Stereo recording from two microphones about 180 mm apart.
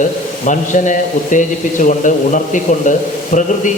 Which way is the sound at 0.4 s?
45° left (ahead or behind).